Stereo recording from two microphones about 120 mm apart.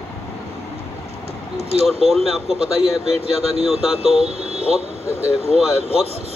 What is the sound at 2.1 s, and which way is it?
Speech, centre (ahead or behind).